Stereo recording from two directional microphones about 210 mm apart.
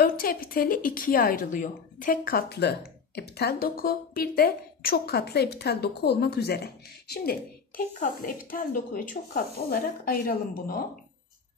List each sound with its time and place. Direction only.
0.0 s a woman's voice: 45° left (ahead or behind)